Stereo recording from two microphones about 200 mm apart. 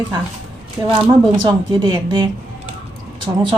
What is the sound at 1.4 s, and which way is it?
Speech, 20° right (ahead or behind).